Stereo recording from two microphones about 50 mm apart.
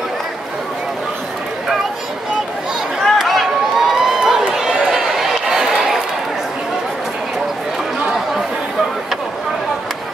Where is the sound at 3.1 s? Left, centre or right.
Centre.